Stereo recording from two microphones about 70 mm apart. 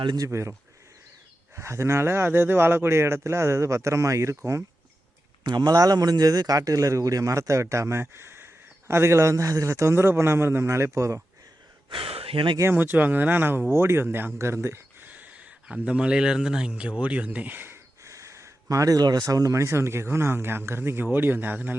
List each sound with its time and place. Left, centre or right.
0.3 s speech: right
1.5 s speech: right
5.5 s speech: right
12.7 s speech: right
15.0 s speech: right
18.0 s speech: right